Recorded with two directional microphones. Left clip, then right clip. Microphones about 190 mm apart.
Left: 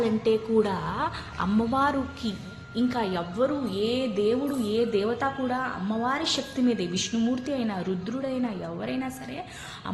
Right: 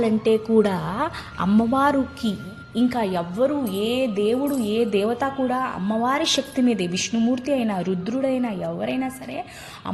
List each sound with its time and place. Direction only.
0.0 s speech: 30° right (ahead or behind)